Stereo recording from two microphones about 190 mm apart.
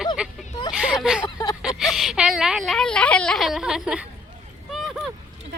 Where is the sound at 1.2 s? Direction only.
20° left (ahead or behind).